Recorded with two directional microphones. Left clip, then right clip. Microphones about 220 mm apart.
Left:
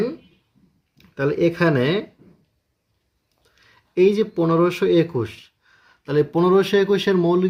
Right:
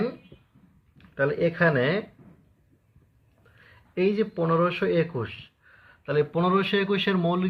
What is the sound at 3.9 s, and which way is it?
Speech, 60° left (ahead or behind).